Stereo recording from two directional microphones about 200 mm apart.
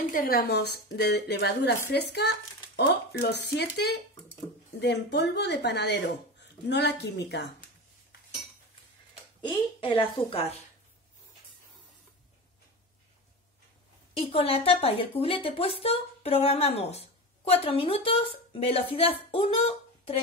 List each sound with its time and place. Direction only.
0.1 s speech: 50° left (ahead or behind)
9.4 s speech: 25° left (ahead or behind)
14.1 s speech: 30° left (ahead or behind)